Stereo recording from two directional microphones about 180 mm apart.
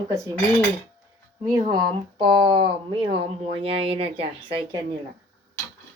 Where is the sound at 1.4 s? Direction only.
25° right (ahead or behind).